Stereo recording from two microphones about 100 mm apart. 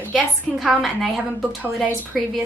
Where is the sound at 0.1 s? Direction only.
5° right (ahead or behind).